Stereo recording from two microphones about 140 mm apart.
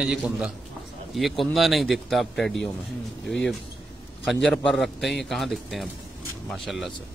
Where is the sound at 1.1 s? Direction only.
Centre (ahead or behind).